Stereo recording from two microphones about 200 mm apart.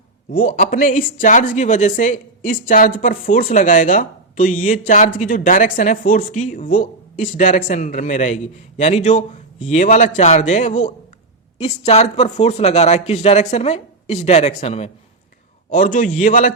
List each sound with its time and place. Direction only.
0.3 s speech: 45° left (ahead or behind)